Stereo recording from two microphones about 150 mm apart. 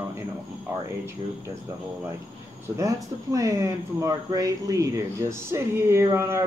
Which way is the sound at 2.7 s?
20° right (ahead or behind).